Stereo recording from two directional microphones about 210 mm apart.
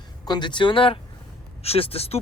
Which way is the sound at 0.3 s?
20° left (ahead or behind).